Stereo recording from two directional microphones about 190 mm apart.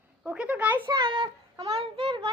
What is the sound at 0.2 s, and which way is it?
Speech, 5° right (ahead or behind).